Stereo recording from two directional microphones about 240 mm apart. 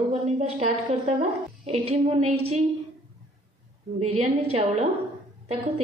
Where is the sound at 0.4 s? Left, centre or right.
Right.